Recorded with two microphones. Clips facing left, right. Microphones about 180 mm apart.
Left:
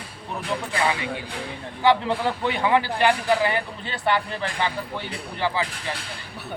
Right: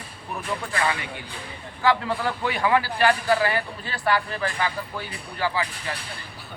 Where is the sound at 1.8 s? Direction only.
20° left (ahead or behind).